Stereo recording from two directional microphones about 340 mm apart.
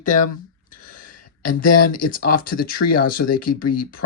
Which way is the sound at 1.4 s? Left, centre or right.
Left.